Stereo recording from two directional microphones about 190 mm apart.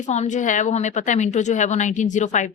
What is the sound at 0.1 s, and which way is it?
Speech, 40° left (ahead or behind).